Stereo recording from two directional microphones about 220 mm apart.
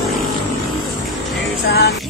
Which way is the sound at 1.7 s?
45° left (ahead or behind).